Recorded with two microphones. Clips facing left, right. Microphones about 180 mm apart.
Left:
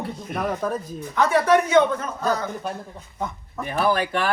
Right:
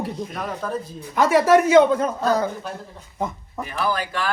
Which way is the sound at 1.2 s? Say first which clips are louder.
Right 3 dB; 10° right (ahead or behind).